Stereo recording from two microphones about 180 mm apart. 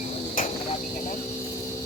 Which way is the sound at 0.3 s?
40° left (ahead or behind).